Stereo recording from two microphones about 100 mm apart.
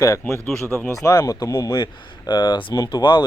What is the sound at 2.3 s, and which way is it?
Speech, 50° left (ahead or behind).